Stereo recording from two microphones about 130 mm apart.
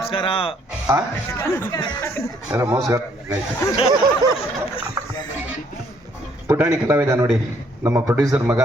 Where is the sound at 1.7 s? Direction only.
35° left (ahead or behind).